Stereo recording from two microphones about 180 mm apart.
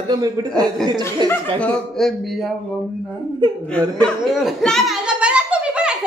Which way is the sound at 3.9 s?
Centre (ahead or behind).